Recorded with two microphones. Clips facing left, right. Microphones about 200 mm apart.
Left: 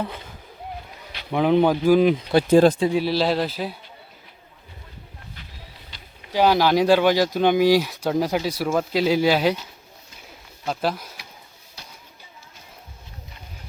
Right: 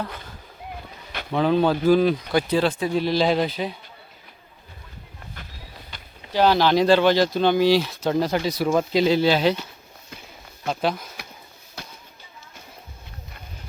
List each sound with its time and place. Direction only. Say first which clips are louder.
1.3 s speech: left 2 dB; 15° left (ahead or behind)
2.5 s speech: left 9 dB; 45° left (ahead or behind)
2.9 s speech: even; 5° left (ahead or behind)
6.3 s speech: even; 10° left (ahead or behind)
10.7 s speech: right 1 dB; centre (ahead or behind)